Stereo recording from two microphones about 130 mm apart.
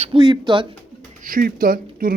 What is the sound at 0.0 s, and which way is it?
Speech, 40° right (ahead or behind).